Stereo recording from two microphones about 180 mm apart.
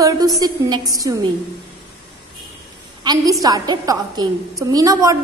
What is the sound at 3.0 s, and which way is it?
A woman's voice, 25° right (ahead or behind).